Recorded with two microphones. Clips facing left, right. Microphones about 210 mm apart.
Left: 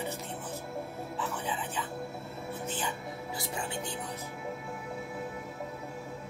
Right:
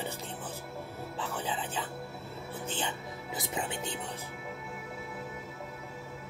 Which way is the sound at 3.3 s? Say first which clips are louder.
Right 2 dB; 20° right (ahead or behind).